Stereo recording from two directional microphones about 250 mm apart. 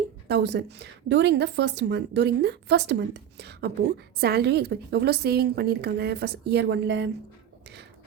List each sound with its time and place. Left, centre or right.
0.3 s a woman's voice: right